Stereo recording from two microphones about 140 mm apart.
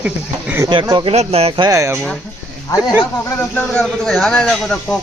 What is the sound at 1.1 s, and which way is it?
Speech, 45° right (ahead or behind).